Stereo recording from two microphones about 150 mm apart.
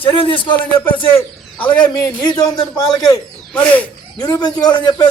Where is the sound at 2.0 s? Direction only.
25° left (ahead or behind).